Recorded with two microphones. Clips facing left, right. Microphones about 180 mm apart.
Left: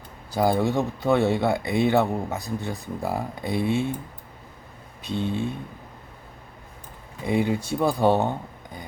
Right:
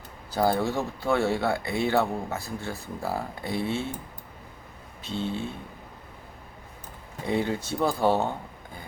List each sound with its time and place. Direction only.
0.3 s speech: 15° left (ahead or behind)
5.0 s speech: 15° left (ahead or behind)
7.3 s speech: 10° left (ahead or behind)